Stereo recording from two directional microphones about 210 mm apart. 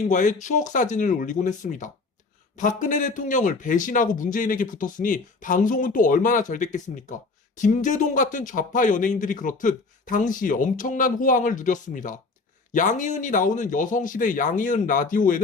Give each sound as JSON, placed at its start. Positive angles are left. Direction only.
{"t": 0.1, "sound": "a man's voice", "side_deg": 35}